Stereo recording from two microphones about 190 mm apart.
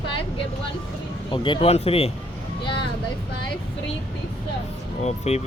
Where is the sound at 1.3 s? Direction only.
25° left (ahead or behind).